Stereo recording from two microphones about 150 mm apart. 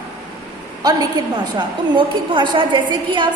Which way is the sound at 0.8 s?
25° right (ahead or behind).